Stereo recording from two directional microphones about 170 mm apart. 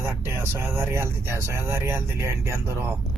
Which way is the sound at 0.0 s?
15° right (ahead or behind).